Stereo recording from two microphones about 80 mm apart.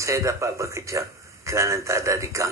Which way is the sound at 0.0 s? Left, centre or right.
Right.